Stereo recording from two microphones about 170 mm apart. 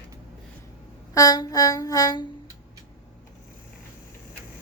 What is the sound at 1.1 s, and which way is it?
A woman's voice, 20° left (ahead or behind).